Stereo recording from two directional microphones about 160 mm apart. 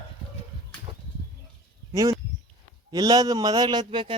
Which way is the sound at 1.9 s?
20° right (ahead or behind).